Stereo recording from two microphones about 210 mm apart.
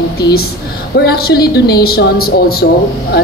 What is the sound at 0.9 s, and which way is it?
A woman's voice, 50° left (ahead or behind).